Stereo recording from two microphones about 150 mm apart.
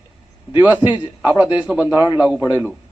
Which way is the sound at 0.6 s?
10° right (ahead or behind).